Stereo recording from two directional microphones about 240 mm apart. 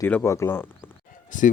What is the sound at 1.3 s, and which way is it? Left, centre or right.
Speech, left.